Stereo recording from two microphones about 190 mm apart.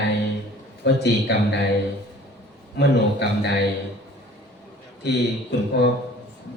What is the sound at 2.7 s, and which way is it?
Speech, 65° left (ahead or behind).